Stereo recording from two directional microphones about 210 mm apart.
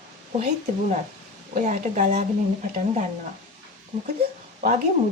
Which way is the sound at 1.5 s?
35° right (ahead or behind).